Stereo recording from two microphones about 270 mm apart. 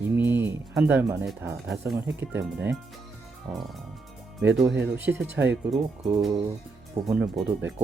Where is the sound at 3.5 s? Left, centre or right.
Centre.